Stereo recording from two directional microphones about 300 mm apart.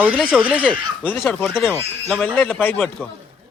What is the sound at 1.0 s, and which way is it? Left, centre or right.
Speech, centre.